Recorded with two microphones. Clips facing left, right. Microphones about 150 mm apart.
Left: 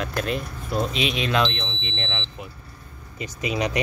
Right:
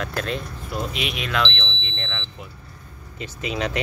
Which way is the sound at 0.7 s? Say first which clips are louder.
Left 4 dB; 25° left (ahead or behind).